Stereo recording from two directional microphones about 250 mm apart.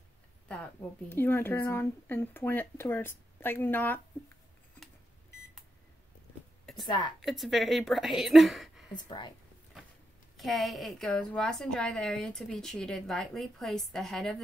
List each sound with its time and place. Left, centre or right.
0.5 s a woman's voice: centre
6.6 s a sound: centre
6.9 s a woman's voice: centre
7.2 s a woman's voice: centre
8.9 s a woman's voice: centre
10.3 s a woman's voice: centre